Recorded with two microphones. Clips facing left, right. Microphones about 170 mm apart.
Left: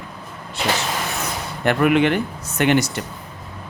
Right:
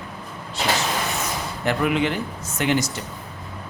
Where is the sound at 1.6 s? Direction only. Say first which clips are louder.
Left 5 dB; 60° left (ahead or behind).